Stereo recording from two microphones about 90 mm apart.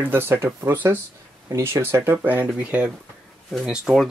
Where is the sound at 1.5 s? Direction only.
30° right (ahead or behind).